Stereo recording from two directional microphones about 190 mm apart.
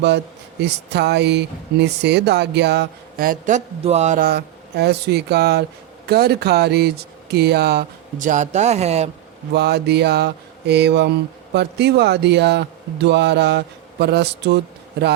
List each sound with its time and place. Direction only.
0.6 s speech: 60° right (ahead or behind); by 4.2 s 35° right (ahead or behind)
4.2 s speech: 55° right (ahead or behind); by 9.0 s 35° right (ahead or behind)
9.5 s speech: 60° right (ahead or behind)